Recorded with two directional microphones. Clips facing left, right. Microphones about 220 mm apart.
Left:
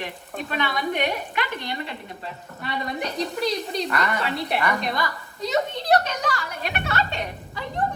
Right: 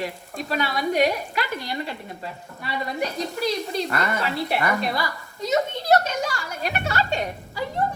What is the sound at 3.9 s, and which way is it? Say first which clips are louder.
Speech: even; 40° right (ahead or behind).